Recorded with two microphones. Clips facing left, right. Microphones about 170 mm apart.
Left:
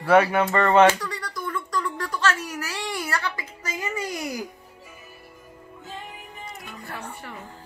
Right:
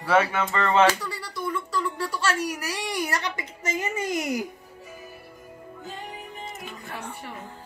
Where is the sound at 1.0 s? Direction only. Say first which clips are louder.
Even; 5° right (ahead or behind); by 4.4 s 20° right (ahead or behind).